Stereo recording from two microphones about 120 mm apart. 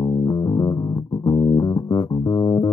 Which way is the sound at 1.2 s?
30° left (ahead or behind).